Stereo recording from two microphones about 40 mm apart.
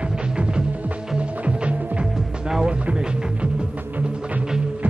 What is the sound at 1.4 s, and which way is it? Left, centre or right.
Music, right.